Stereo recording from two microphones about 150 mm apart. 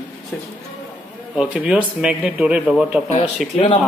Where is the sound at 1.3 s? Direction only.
5° right (ahead or behind).